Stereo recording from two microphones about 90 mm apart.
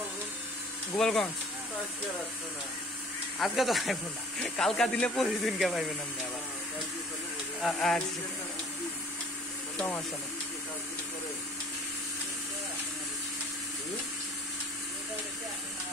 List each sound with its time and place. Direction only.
0.9 s speech: 5° left (ahead or behind)
3.3 s speech: centre (ahead or behind)
7.6 s speech: 5° left (ahead or behind)
9.8 s speech: 20° left (ahead or behind)